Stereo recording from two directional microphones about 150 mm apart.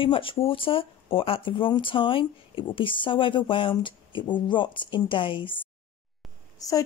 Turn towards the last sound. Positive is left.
turn(degrees=25)  # may be behind; listen again after turning